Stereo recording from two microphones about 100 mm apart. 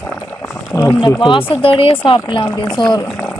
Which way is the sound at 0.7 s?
20° left (ahead or behind).